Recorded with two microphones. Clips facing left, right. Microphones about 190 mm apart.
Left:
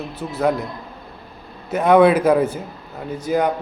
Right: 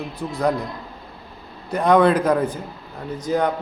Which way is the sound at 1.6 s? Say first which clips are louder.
Left 3 dB; 5° left (ahead or behind).